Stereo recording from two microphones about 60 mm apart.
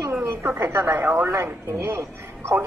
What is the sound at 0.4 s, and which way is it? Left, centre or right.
Speech, right.